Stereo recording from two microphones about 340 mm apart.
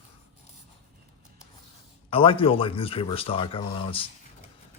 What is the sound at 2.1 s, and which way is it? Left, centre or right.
Speech, centre.